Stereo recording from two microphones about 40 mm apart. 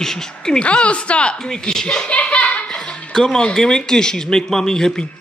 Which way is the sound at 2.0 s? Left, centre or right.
Left.